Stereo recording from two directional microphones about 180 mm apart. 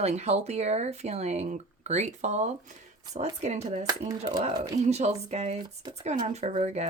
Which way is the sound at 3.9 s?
20° right (ahead or behind).